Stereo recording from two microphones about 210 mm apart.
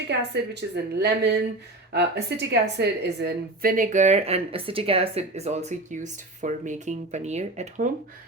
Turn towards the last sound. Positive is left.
turn(degrees=-35)  # may be behind; listen again after turning